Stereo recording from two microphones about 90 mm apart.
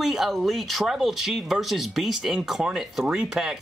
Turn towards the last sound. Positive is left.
turn(degrees=-5)  # may be behind; listen again after turning